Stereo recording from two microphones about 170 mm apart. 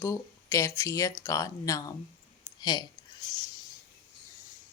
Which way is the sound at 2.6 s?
25° left (ahead or behind).